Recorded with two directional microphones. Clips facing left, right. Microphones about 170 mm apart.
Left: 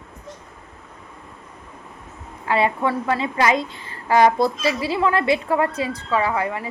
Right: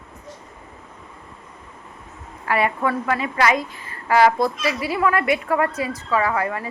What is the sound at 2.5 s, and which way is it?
A woman's voice, 25° left (ahead or behind).